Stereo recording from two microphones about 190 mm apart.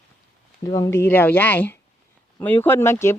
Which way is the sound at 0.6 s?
20° left (ahead or behind).